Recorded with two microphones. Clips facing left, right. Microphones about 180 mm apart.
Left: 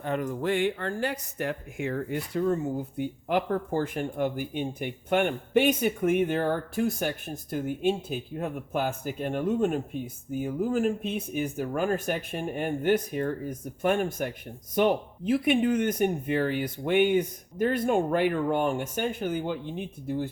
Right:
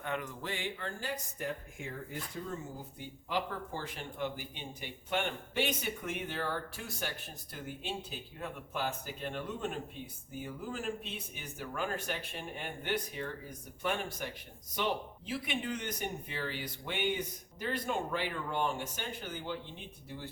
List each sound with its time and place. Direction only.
0.0 s speech: 40° left (ahead or behind)